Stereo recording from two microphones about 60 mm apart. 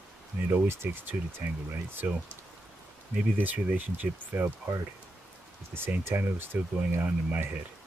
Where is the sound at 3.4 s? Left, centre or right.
Right.